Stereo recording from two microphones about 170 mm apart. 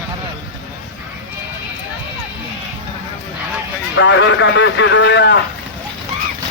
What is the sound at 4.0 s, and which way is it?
A man's voice, 90° left.